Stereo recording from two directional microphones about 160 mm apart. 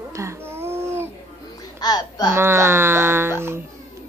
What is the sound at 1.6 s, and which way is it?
Babbling, 25° left (ahead or behind).